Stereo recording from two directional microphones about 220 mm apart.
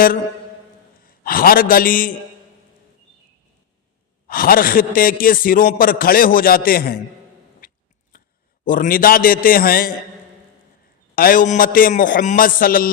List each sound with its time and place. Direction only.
1.0 s a man's voice: 40° left (ahead or behind)
4.3 s a man's voice: 40° left (ahead or behind)
7.6 s cat: 40° left (ahead or behind)
8.1 s a sound: 40° left (ahead or behind)
8.6 s a man's voice: 40° left (ahead or behind)
11.1 s a man's voice: 40° left (ahead or behind)